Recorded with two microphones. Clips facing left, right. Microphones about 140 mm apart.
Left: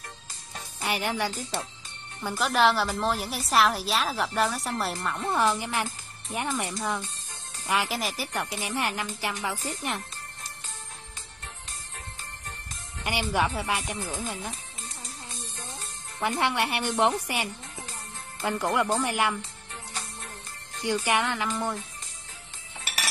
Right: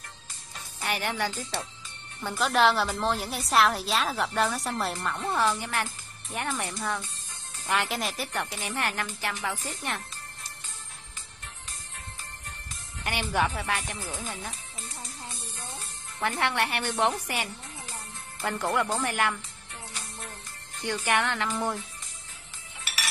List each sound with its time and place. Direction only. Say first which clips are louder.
0.7 s speech: left 1 dB; 15° left (ahead or behind)
2.2 s a woman's voice: even; centre (ahead or behind)
8.3 s speech: left 1 dB; 10° left (ahead or behind)
13.0 s speech: left 1 dB; 15° left (ahead or behind)
16.2 s speech: left 1 dB; 15° left (ahead or behind)
20.8 s speech: left 1 dB; 10° left (ahead or behind)
21.5 s a woman's voice: even; centre (ahead or behind)